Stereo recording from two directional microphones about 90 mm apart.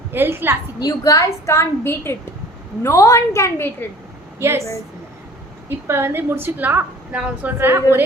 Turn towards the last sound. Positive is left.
turn(degrees=-20)  # may be behind; listen again after turning